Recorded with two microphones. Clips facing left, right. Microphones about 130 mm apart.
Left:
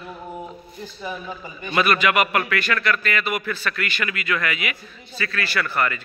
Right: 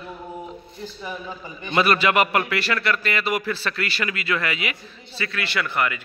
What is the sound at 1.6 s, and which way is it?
A man's voice, 25° right (ahead or behind).